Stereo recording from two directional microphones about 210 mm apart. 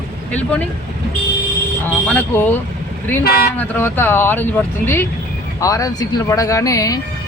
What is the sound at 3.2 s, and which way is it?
Speech, 45° left (ahead or behind).